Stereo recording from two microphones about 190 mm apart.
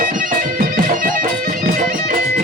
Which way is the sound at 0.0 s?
45° right (ahead or behind).